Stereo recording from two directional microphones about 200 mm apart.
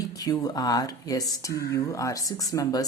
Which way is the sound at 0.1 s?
20° left (ahead or behind).